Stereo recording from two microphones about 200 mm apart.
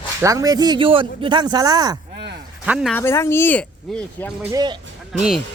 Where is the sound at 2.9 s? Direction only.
15° left (ahead or behind).